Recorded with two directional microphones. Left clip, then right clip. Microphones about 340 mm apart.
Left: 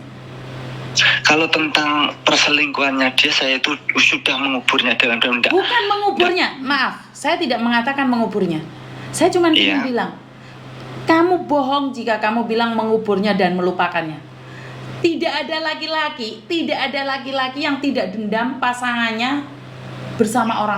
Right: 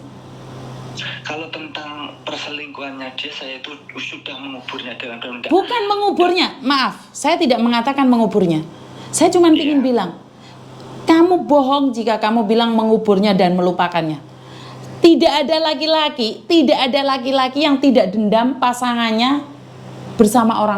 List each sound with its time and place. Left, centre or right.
0.9 s speech: left
6.3 s a woman's voice: right
9.6 s a woman's voice: left
9.8 s a woman's voice: right
15.0 s a woman's voice: right